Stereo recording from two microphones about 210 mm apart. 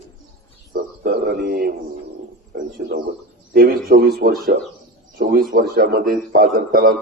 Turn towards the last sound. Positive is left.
turn(degrees=-45)  # may be behind; listen again after turning